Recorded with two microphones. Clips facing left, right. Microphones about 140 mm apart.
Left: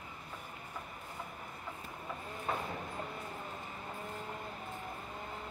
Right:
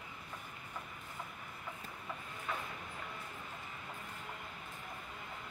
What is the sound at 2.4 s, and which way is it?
Train, 35° left (ahead or behind).